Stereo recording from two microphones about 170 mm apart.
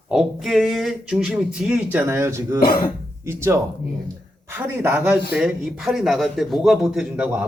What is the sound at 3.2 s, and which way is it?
Speech, 15° right (ahead or behind).